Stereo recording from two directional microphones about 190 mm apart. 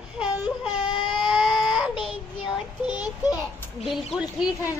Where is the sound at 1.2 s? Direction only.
Centre (ahead or behind).